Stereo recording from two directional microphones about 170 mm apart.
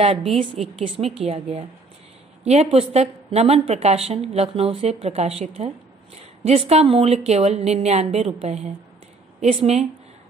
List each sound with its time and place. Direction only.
0.0 s a woman's voice: 35° right (ahead or behind)